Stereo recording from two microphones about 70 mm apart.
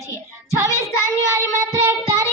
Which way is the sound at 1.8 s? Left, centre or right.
Right.